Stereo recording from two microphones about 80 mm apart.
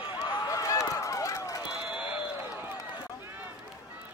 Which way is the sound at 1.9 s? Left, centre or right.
Right.